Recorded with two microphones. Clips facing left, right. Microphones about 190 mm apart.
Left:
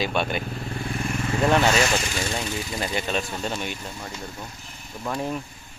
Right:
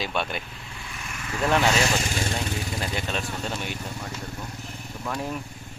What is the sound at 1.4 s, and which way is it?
Speech, 5° left (ahead or behind).